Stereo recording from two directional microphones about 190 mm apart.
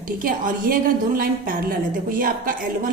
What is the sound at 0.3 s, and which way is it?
A woman's voice, 45° right (ahead or behind).